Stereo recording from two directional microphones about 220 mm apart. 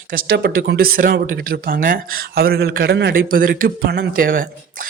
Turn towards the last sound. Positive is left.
turn(degrees=-40)  # may be behind; listen again after turning